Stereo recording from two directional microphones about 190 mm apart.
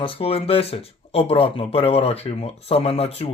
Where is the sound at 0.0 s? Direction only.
30° left (ahead or behind).